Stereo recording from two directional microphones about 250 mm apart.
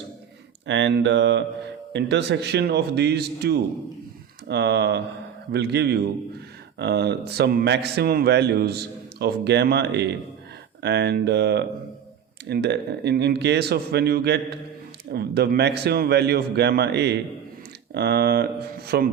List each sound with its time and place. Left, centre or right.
0.7 s a man's voice: right